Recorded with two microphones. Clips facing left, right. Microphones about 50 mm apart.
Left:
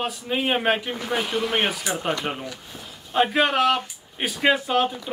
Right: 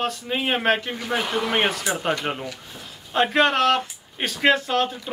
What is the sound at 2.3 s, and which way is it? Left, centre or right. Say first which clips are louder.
Speech: right 1 dB; centre.